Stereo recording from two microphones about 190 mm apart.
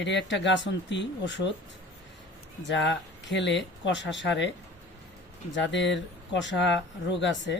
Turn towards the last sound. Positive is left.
turn(degrees=70)  # may be behind; listen again after turning